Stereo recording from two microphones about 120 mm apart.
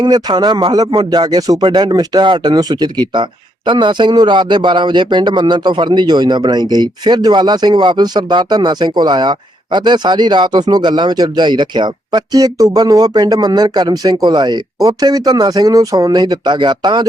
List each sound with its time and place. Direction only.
0.0 s speech: 35° right (ahead or behind)